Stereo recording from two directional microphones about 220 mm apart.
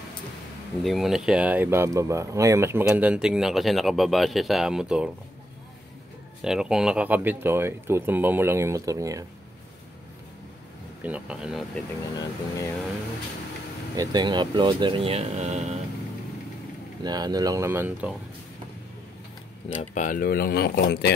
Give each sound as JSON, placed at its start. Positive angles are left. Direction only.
{"t": 0.8, "sound": "speech", "side_deg": 0}
{"t": 6.4, "sound": "speech", "side_deg": -5}
{"t": 11.0, "sound": "speech", "side_deg": -5}
{"t": 12.2, "sound": "speech", "side_deg": 15}
{"t": 13.9, "sound": "speech", "side_deg": -20}
{"t": 17.0, "sound": "speech", "side_deg": -20}
{"t": 19.7, "sound": "speech", "side_deg": 35}